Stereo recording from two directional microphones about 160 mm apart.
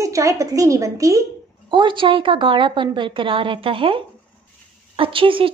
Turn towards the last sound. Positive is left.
turn(degrees=-35)  # may be behind; listen again after turning